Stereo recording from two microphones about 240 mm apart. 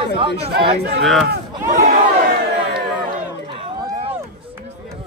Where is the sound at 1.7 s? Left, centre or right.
Right.